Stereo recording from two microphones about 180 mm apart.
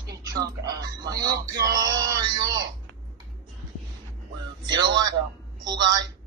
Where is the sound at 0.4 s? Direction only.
20° right (ahead or behind).